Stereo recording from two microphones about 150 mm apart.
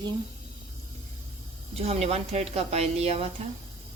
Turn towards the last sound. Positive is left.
turn(degrees=-40)  # may be behind; listen again after turning